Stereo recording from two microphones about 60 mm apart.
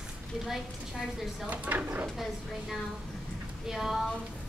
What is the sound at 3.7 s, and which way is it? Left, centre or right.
Speech, centre.